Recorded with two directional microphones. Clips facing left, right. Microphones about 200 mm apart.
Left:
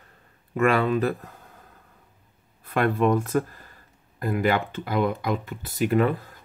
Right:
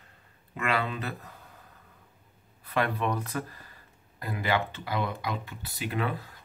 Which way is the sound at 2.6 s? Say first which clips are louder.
Left 7 dB; 50° left (ahead or behind).